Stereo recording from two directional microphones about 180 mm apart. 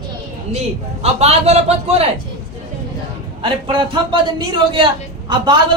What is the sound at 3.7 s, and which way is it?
A man's voice, 25° right (ahead or behind).